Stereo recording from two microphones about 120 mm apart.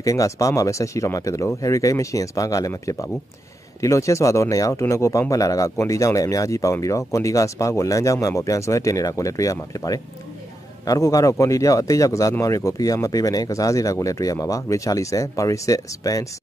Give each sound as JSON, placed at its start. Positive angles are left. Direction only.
{"t": 0.0, "sound": "speech", "side_deg": 30}